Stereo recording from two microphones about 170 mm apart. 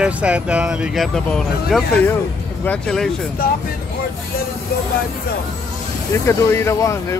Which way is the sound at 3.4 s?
60° left (ahead or behind).